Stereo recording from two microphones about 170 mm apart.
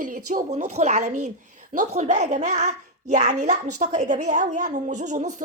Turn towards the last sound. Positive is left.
turn(degrees=-45)  # may be behind; listen again after turning